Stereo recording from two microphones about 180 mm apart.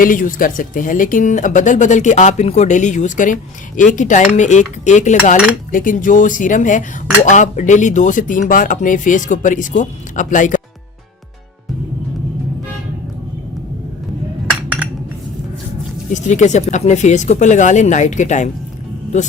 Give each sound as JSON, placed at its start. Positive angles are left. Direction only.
{"t": 0.0, "sound": "speech", "side_deg": 50}
{"t": 16.1, "sound": "speech", "side_deg": 40}